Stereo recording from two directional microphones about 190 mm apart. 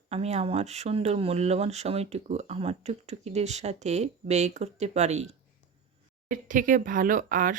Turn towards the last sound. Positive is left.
turn(degrees=-45)  # may be behind; listen again after turning